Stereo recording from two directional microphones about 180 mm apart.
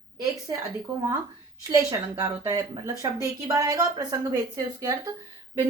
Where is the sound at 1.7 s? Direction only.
15° right (ahead or behind).